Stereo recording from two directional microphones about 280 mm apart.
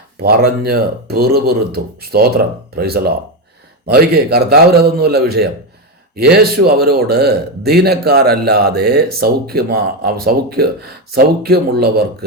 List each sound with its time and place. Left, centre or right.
0.2 s a man's voice: right